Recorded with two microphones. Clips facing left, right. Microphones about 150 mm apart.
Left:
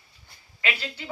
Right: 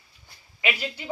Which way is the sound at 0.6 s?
15° right (ahead or behind).